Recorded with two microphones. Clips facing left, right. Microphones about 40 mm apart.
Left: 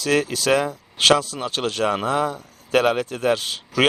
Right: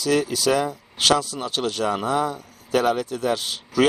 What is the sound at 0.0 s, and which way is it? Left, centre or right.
A man's voice, left.